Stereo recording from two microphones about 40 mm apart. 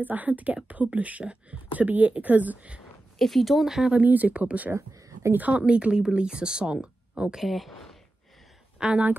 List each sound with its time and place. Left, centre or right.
0.0 s speech: right
1.9 s speech: right
3.2 s speech: centre
3.6 s speech: centre
3.9 s speech: right
5.5 s speech: right
7.3 s speech: centre
8.7 s speech: right